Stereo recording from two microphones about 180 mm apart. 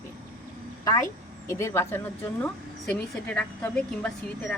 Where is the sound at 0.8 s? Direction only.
20° left (ahead or behind).